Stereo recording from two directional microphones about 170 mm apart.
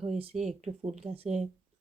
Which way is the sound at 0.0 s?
40° right (ahead or behind).